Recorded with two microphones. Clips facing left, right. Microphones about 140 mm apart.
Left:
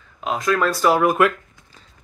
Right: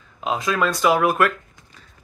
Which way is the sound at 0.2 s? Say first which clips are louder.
Even; 25° right (ahead or behind).